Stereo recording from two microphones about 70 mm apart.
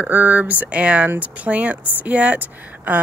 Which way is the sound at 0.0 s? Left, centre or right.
Right.